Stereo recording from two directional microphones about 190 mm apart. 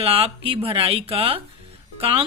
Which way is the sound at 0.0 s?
30° right (ahead or behind).